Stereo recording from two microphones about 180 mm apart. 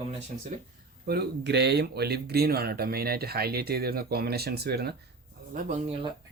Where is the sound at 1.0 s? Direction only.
60° right (ahead or behind).